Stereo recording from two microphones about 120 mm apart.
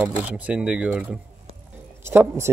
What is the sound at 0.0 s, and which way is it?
Speech, 10° right (ahead or behind).